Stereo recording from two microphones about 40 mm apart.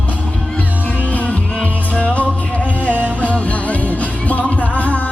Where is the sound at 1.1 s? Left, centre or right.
Left.